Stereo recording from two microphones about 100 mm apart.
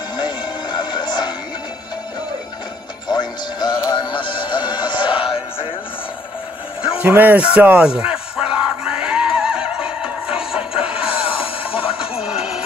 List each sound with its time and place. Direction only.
0.2 s music: 45° left (ahead or behind)
3.1 s music: 45° left (ahead or behind); by 5.7 s 65° left (ahead or behind)
7.0 s music: 20° right (ahead or behind)
11.2 s music: 65° left (ahead or behind)
12.2 s music: 5° right (ahead or behind)